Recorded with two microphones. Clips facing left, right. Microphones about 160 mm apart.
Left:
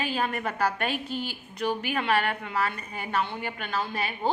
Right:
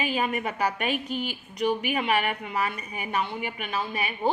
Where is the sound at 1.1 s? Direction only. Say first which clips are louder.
Right 2 dB; 30° left (ahead or behind).